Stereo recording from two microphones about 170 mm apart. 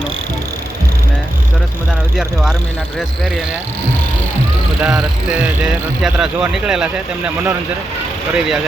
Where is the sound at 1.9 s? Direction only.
Centre (ahead or behind).